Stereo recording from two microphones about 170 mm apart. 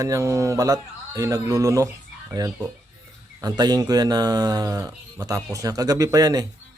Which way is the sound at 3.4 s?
25° right (ahead or behind).